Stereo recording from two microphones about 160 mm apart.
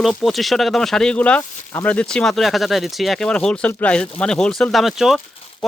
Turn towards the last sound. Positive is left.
turn(degrees=0)  # may be behind; listen again after turning